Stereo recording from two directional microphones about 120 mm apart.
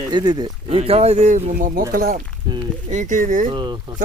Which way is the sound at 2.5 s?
40° right (ahead or behind).